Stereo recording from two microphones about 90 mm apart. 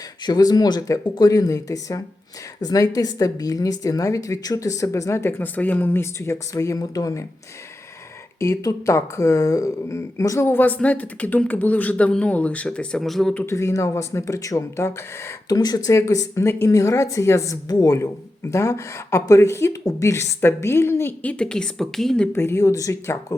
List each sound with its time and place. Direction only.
0.2 s a woman's voice: 50° left (ahead or behind)
8.4 s a woman's voice: 35° left (ahead or behind); by 13.3 s centre (ahead or behind)
13.5 s a woman's voice: 35° left (ahead or behind)
15.4 s a woman's voice: 45° left (ahead or behind); by 22.3 s 5° left (ahead or behind)
22.3 s a woman's voice: 30° left (ahead or behind)